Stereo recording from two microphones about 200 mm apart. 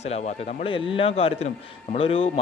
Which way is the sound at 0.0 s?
35° left (ahead or behind).